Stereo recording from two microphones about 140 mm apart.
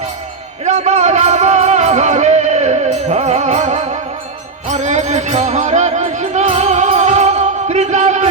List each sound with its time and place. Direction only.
0.6 s music: 55° right (ahead or behind)